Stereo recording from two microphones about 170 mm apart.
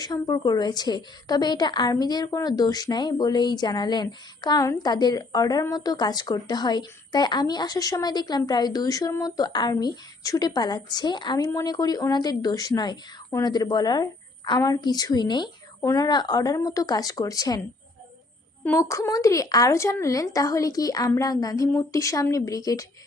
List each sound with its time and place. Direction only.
0.0 s a woman's voice: 25° left (ahead or behind)
18.6 s a woman's voice: 15° left (ahead or behind)